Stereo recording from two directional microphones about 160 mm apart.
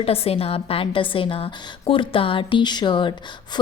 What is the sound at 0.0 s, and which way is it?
A woman's voice, 35° left (ahead or behind).